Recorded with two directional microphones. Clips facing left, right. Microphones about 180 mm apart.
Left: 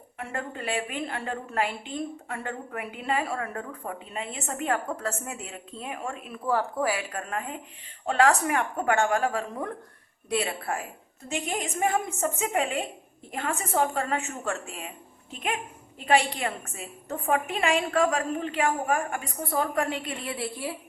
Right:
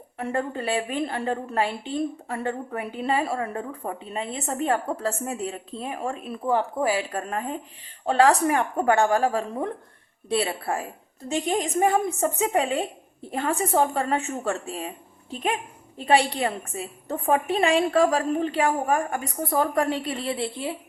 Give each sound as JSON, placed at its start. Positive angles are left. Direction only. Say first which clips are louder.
{"t": 0.2, "sound": "a woman's voice", "louder": "right 7 dB", "side_deg": -35}